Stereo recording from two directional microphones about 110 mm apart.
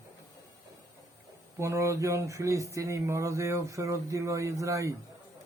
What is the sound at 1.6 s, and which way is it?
A man's voice, 25° right (ahead or behind).